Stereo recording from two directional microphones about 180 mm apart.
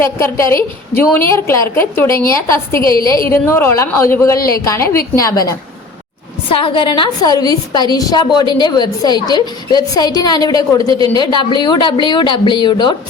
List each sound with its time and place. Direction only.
0.0 s a woman's voice: 15° left (ahead or behind)